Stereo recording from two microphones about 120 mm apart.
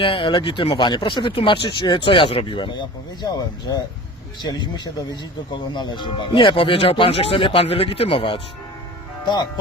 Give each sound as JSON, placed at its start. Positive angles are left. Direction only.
{"t": 0.0, "sound": "speech", "side_deg": 45}